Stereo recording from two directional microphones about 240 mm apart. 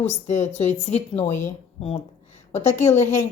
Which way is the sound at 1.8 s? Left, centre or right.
Left.